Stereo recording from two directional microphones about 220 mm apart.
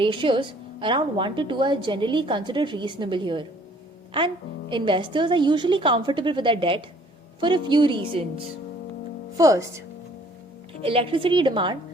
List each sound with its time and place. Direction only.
0.0 s a woman's voice: 20° right (ahead or behind)
4.7 s a woman's voice: 20° right (ahead or behind)
10.8 s a woman's voice: 25° right (ahead or behind)